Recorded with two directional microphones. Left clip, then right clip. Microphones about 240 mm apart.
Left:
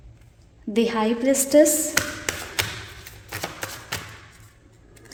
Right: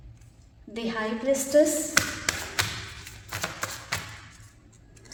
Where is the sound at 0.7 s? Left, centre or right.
Left.